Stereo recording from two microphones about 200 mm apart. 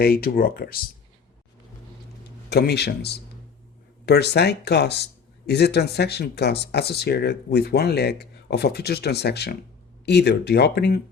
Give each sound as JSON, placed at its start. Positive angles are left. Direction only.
{"t": 0.0, "sound": "speech", "side_deg": 50}
{"t": 2.5, "sound": "speech", "side_deg": 55}